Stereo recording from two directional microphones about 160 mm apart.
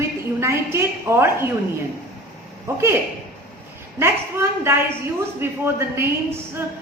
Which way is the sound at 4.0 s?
15° right (ahead or behind).